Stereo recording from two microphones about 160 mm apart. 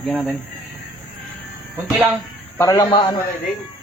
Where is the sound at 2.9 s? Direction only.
30° left (ahead or behind).